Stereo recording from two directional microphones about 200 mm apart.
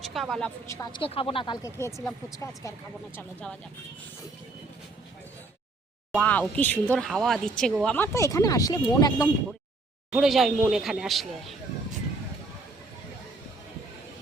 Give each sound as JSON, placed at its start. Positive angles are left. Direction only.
{"t": 0.0, "sound": "speech", "side_deg": 0}
{"t": 0.7, "sound": "speech", "side_deg": 15}
{"t": 1.0, "sound": "speech", "side_deg": 25}
{"t": 6.1, "sound": "speech", "side_deg": 5}
{"t": 10.1, "sound": "speech", "side_deg": 0}